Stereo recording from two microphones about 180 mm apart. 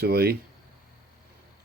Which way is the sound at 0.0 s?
60° right (ahead or behind).